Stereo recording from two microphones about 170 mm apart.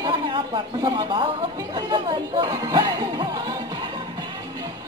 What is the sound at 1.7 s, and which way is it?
Speech, 25° right (ahead or behind).